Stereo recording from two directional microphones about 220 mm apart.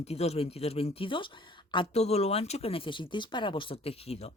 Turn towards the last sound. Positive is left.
turn(degrees=25)  # may be behind; listen again after turning